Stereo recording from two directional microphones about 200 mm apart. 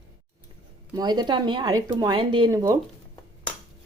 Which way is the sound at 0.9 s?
20° right (ahead or behind).